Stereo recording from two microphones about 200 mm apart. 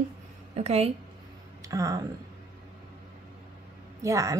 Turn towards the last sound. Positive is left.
turn(degrees=-15)  # may be behind; listen again after turning